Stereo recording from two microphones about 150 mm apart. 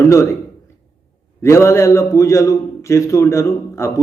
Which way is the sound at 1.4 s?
20° left (ahead or behind).